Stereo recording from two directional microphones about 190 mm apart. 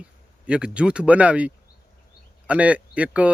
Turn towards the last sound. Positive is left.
turn(degrees=-5)  # may be behind; listen again after turning